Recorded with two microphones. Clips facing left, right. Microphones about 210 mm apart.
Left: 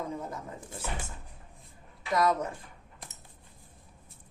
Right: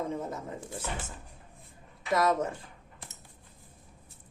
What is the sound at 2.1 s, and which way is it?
Speech, 25° right (ahead or behind).